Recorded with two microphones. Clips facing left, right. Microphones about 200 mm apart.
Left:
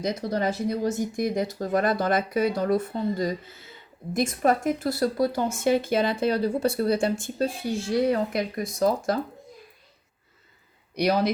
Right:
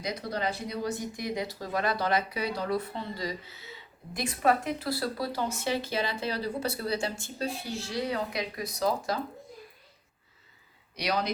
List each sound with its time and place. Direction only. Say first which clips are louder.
0.0 s speech: left 6 dB; 45° left (ahead or behind)